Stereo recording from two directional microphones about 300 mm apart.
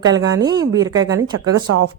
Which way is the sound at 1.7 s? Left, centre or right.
Right.